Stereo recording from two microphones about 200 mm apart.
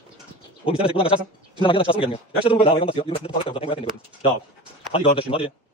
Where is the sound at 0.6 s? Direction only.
25° left (ahead or behind).